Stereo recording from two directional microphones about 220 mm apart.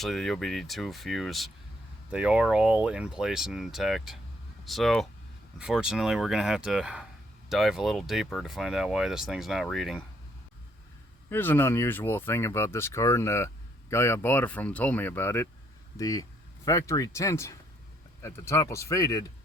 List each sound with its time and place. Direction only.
0.0 s speech: centre (ahead or behind)
11.3 s speech: 10° left (ahead or behind)